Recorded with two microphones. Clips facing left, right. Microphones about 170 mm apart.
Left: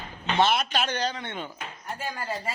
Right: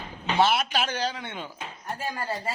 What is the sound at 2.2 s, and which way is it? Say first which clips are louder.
Speech: right 1 dB; 30° right (ahead or behind).